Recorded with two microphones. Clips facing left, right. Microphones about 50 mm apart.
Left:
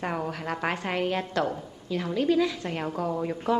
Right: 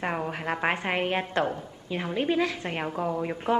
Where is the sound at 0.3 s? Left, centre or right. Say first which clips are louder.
Right 2 dB; right.